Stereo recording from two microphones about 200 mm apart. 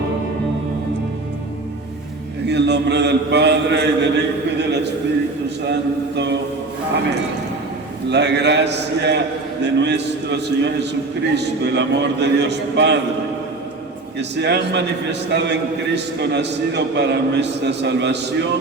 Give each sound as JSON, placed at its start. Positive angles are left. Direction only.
{"t": 2.5, "sound": "a man's voice", "side_deg": -60}
{"t": 6.1, "sound": "a man's voice", "side_deg": -60}
{"t": 8.1, "sound": "a man's voice", "side_deg": -60}
{"t": 14.2, "sound": "a man's voice", "side_deg": -60}